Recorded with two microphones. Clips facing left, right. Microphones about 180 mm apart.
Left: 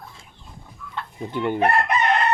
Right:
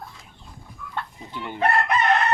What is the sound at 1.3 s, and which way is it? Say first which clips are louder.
Chicken: left 10 dB; 55° left (ahead or behind).